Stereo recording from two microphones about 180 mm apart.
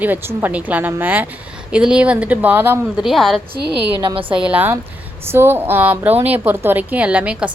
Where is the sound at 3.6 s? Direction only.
65° right (ahead or behind).